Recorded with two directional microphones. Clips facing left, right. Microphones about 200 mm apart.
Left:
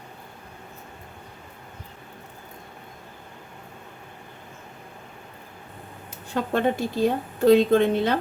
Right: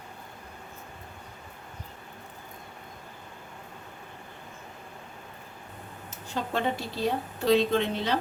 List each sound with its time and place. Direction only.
6.3 s speech: 55° left (ahead or behind)